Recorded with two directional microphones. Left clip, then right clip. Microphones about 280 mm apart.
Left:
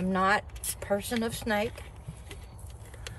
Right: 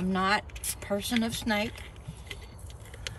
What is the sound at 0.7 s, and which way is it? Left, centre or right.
Speech, left.